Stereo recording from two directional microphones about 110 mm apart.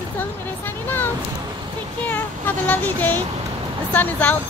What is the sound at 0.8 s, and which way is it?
Speech, 20° left (ahead or behind).